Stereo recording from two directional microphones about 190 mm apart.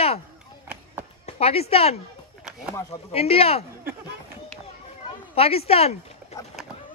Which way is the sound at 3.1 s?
30° left (ahead or behind).